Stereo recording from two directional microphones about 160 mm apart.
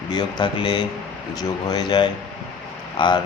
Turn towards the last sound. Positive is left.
turn(degrees=30)  # may be behind; listen again after turning